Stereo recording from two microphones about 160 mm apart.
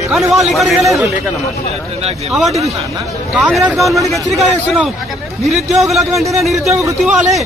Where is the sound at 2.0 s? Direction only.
40° right (ahead or behind).